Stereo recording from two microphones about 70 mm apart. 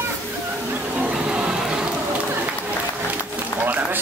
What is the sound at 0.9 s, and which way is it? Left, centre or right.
Music, right.